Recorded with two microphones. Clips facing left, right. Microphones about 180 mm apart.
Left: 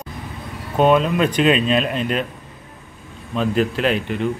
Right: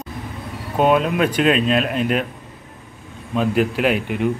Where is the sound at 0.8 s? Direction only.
5° right (ahead or behind).